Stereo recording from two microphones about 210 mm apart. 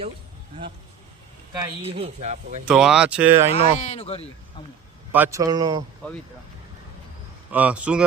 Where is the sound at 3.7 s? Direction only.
30° left (ahead or behind).